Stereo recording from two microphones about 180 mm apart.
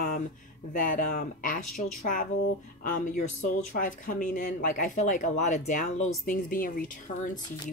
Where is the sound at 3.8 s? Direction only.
50° left (ahead or behind).